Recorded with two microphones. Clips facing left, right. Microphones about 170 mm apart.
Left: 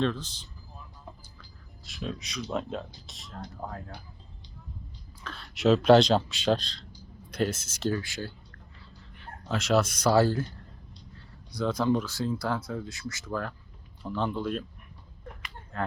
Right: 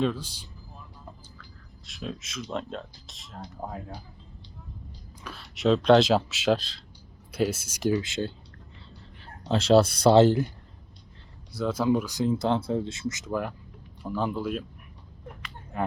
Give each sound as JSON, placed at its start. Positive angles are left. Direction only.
{"t": 0.0, "sound": "speech", "side_deg": -10}
{"t": 1.9, "sound": "speech", "side_deg": 0}
{"t": 3.6, "sound": "speech", "side_deg": -15}
{"t": 5.2, "sound": "speech", "side_deg": -5}
{"t": 9.5, "sound": "speech", "side_deg": -30}
{"t": 11.5, "sound": "speech", "side_deg": -5}
{"t": 15.7, "sound": "speech", "side_deg": -15}